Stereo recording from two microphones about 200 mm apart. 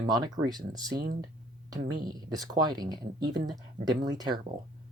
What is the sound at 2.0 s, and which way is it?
Speech, 20° right (ahead or behind).